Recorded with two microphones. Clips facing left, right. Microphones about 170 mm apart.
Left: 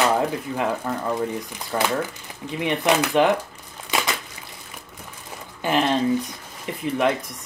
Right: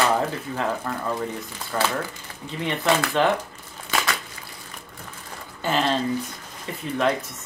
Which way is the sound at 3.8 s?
20° left (ahead or behind).